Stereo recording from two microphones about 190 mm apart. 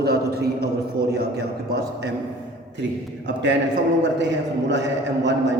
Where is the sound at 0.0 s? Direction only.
55° right (ahead or behind).